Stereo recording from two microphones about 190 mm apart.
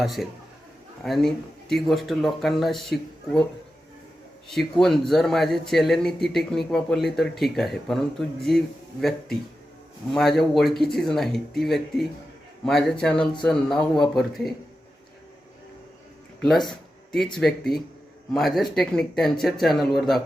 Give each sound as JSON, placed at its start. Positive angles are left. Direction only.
{"t": 0.0, "sound": "a man's voice", "side_deg": 0}
{"t": 4.4, "sound": "a man's voice", "side_deg": 0}
{"t": 16.6, "sound": "a sound", "side_deg": 0}
{"t": 17.3, "sound": "a man's voice", "side_deg": 0}